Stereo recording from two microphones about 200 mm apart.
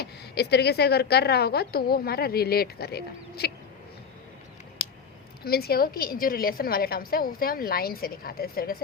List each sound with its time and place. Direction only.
0.0 s speech: 55° left (ahead or behind)
5.5 s speech: 50° left (ahead or behind)